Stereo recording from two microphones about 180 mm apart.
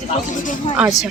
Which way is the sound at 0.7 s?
5° right (ahead or behind).